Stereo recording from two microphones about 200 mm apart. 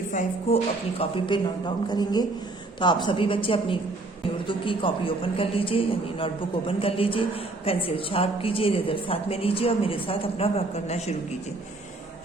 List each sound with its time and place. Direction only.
0.1 s a man's voice: 35° left (ahead or behind)